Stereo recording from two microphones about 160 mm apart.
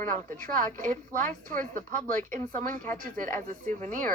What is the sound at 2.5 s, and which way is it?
A woman's voice, 60° right (ahead or behind).